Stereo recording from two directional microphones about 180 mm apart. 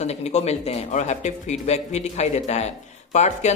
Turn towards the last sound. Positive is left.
turn(degrees=40)  # may be behind; listen again after turning